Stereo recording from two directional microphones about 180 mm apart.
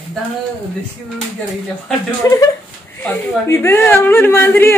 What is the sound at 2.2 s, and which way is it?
Speech, 15° left (ahead or behind).